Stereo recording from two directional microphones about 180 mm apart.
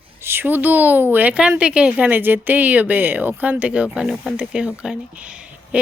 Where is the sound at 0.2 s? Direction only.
15° right (ahead or behind).